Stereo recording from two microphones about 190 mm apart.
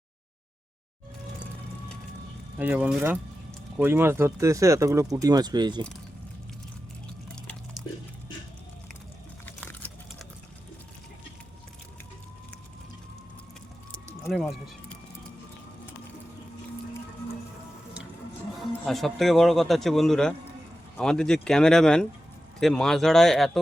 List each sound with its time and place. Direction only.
2.6 s speech: 10° right (ahead or behind)
9.5 s a sound: 10° left (ahead or behind)
14.3 s speech: centre (ahead or behind)
18.9 s a man's voice: centre (ahead or behind)